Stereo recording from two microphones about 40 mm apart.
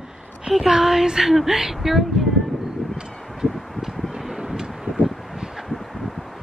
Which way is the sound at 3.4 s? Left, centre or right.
Centre.